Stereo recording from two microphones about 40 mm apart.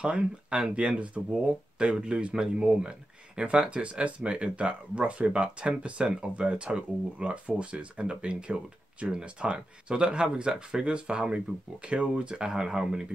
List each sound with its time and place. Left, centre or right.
0.0 s speech: right